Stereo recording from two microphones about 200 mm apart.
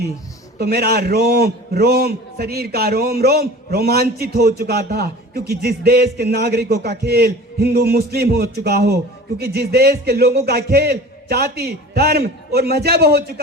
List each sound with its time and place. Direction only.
0.6 s a man's voice: 50° right (ahead or behind)